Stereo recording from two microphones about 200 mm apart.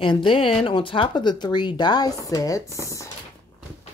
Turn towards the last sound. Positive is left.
turn(degrees=15)  # may be behind; listen again after turning